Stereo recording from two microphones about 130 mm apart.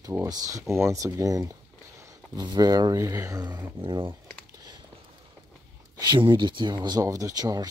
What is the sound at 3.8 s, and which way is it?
Speech, 40° right (ahead or behind).